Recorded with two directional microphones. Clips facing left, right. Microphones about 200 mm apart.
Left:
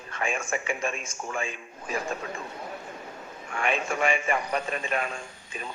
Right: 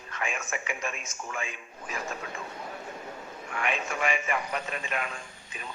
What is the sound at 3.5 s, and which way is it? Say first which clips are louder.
A man's voice: left 4 dB; 30° left (ahead or behind).